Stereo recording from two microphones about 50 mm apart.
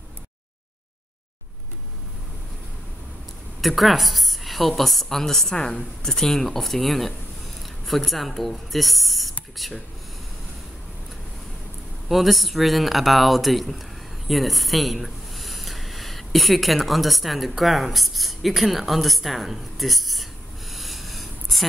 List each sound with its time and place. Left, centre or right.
3.6 s a woman's voice: centre
5.6 s a woman's voice: left
6.0 s a woman's voice: centre
12.1 s a man's voice: centre